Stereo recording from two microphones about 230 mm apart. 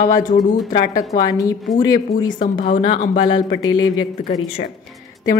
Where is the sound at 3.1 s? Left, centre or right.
Left.